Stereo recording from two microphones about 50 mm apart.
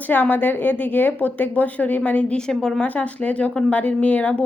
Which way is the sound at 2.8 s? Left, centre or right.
Left.